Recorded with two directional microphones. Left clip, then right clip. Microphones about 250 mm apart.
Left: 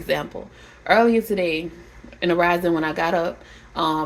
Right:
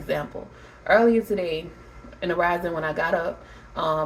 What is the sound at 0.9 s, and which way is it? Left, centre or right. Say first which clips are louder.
Speech: left 1 dB; left.